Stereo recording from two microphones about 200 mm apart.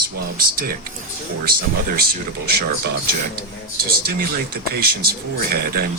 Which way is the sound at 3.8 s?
50° right (ahead or behind).